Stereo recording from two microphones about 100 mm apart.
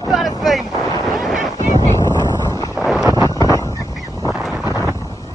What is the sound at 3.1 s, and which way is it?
Wind noise, 35° right (ahead or behind).